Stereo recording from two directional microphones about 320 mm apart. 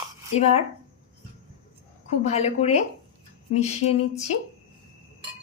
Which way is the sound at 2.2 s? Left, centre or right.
Centre.